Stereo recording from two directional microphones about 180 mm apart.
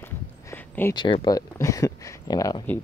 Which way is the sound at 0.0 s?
10° left (ahead or behind).